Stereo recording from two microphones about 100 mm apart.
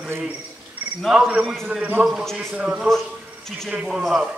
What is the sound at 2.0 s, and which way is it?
A man's voice, centre (ahead or behind).